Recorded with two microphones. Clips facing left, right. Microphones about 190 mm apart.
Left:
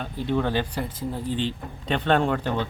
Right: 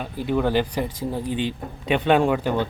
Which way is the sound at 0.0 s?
10° right (ahead or behind).